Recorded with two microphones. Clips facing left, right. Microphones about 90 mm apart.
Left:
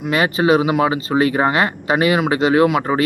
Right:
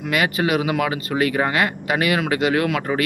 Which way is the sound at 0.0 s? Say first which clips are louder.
Left 4 dB; 30° left (ahead or behind).